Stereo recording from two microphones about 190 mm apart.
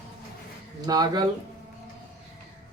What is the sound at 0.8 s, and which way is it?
Speech, 20° right (ahead or behind).